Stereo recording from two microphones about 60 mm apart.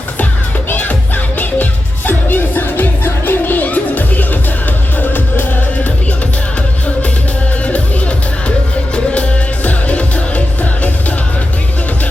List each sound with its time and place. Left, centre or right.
0.7 s music: left
7.6 s music: left